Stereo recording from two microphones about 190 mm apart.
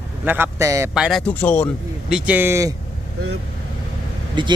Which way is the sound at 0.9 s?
Centre (ahead or behind).